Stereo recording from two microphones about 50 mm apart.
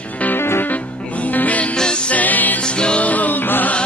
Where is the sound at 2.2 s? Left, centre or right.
Left.